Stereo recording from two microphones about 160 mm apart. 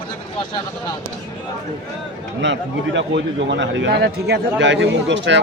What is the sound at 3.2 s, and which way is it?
Speech, 90° right.